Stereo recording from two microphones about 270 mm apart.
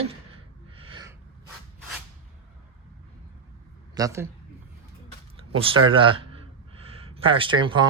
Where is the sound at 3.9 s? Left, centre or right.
Centre.